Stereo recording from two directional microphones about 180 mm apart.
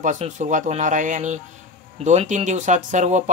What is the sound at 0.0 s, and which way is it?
Speech, 45° right (ahead or behind).